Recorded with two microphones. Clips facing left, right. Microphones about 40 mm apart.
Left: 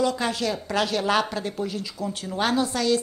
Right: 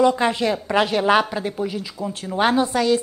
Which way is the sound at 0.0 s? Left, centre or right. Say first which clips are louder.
Right 6 dB; right.